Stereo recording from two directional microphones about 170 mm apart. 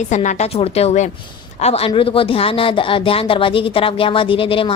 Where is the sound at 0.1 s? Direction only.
45° left (ahead or behind).